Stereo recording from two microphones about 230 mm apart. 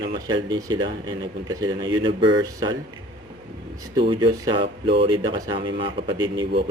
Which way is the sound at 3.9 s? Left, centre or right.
Right.